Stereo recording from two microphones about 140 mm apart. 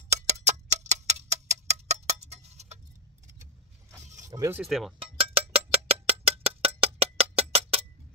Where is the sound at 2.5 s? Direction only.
55° right (ahead or behind).